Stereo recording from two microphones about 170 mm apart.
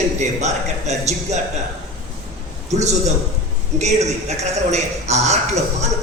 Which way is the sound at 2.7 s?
40° right (ahead or behind).